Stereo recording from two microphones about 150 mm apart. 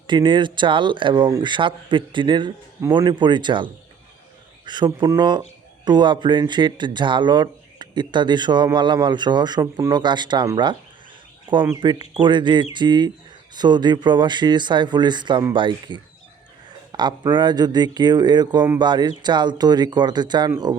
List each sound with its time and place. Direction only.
0.1 s speech: 30° right (ahead or behind)
11.8 s speech: 35° right (ahead or behind)